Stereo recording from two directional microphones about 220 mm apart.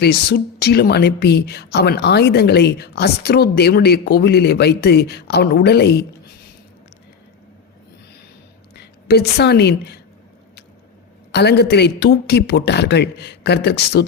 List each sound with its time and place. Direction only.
0.0 s speech: 45° left (ahead or behind)
8.7 s a woman's voice: 50° left (ahead or behind)
11.3 s speech: 50° left (ahead or behind)